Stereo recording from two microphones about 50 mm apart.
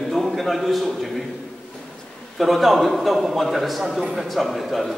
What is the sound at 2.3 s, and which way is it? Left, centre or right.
A man's voice, centre.